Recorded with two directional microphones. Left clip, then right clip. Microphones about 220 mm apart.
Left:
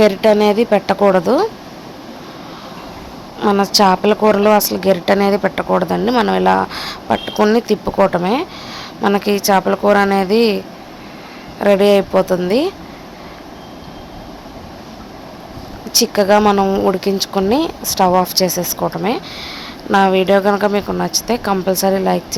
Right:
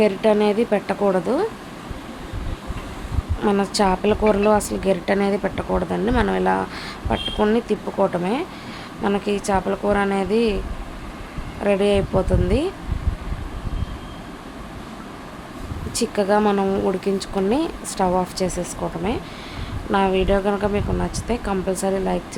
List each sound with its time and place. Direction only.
0.0 s speech: 20° left (ahead or behind)
3.4 s a woman's voice: 10° left (ahead or behind)
11.6 s speech: 20° left (ahead or behind)
16.0 s a woman's voice: 15° left (ahead or behind)